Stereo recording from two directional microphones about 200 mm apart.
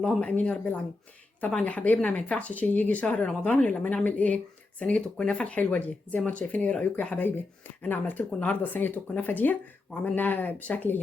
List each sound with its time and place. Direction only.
0.0 s speech: 5° left (ahead or behind)